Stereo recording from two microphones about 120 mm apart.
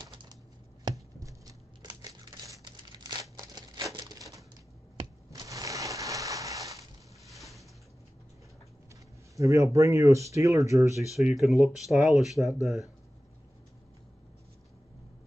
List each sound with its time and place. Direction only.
0.0 s computer keyboard: 40° right (ahead or behind)
0.8 s crumpling: 30° right (ahead or behind)
5.3 s a sound: 30° right (ahead or behind)
7.3 s a sound: centre (ahead or behind)
9.4 s speech: 25° right (ahead or behind)
11.1 s speech: centre (ahead or behind)